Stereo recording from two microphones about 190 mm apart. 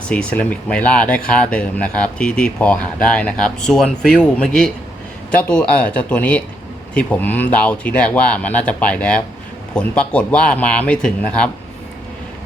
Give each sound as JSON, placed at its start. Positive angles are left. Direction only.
{"t": 0.1, "sound": "speech", "side_deg": 5}